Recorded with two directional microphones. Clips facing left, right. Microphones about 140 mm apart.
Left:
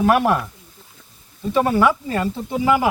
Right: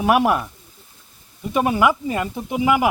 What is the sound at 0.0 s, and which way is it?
Speech, 10° right (ahead or behind).